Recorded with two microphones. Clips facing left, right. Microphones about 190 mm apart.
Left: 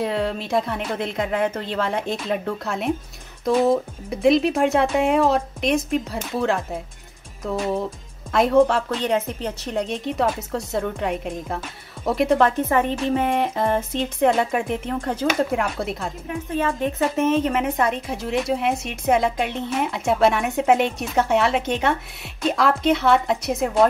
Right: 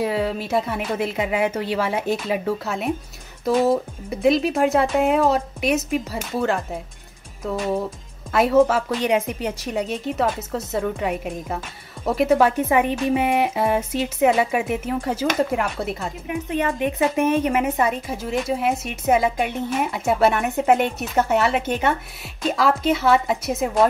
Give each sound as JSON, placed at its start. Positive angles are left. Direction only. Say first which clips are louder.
{"t": 0.0, "sound": "a woman's voice", "louder": "right 1 dB", "side_deg": -5}
{"t": 16.3, "sound": "a woman's voice", "louder": "right 1 dB", "side_deg": -15}